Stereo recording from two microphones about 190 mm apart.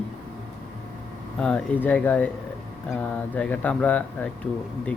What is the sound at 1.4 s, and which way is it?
Speech, 5° left (ahead or behind).